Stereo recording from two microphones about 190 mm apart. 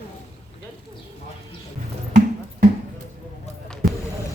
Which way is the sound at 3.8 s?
50° right (ahead or behind).